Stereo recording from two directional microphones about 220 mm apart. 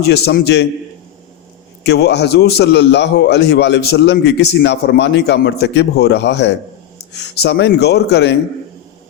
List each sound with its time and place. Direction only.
0.0 s a man's voice: 50° left (ahead or behind)
1.8 s a man's voice: 50° left (ahead or behind)